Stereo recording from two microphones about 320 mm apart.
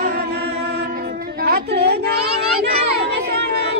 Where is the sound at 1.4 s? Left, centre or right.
Right.